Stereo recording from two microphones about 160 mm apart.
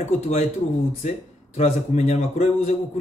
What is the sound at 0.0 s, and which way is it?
Speech, 45° left (ahead or behind).